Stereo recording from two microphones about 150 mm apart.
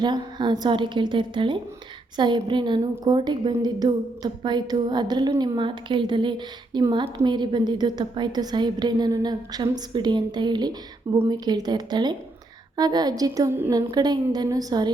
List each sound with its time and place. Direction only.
0.0 s a woman's voice: 30° right (ahead or behind)